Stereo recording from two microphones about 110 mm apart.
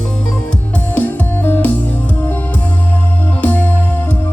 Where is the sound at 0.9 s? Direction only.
15° left (ahead or behind).